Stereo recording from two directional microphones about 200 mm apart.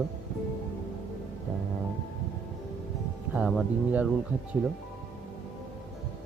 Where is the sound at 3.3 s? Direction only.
Centre (ahead or behind).